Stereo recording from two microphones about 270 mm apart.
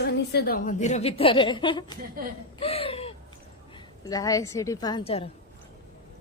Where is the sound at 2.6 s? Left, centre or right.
Left.